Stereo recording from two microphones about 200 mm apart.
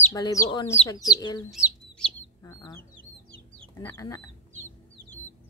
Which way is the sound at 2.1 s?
15° left (ahead or behind).